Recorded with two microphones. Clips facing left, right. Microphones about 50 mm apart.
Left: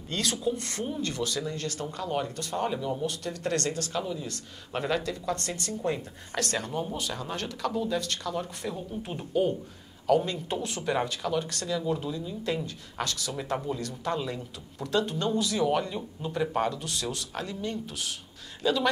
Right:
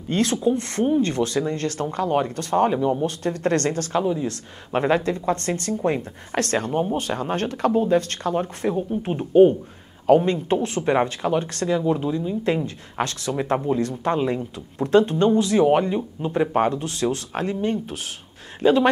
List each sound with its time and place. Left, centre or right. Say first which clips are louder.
0.1 s speech: right 9 dB; right
4.0 s speech: right 11 dB; right